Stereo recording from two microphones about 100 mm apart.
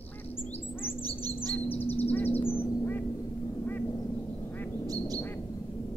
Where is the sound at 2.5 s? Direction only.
20° left (ahead or behind).